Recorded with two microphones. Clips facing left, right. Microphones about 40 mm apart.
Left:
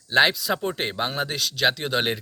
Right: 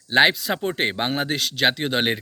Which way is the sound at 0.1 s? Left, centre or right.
Right.